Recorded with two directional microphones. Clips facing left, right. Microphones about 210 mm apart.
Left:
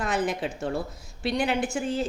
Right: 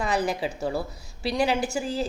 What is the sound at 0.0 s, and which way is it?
A woman's voice, centre (ahead or behind).